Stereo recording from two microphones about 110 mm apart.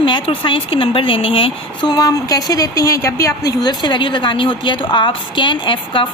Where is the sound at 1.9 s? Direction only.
35° left (ahead or behind).